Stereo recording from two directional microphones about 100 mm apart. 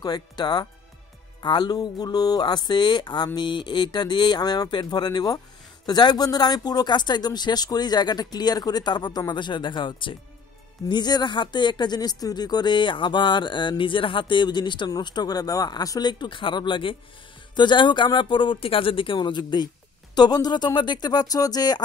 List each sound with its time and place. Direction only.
0.0 s speech: 45° left (ahead or behind)